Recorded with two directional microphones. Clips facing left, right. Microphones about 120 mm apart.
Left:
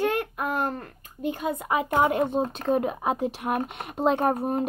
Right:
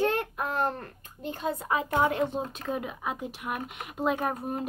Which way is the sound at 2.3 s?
35° left (ahead or behind).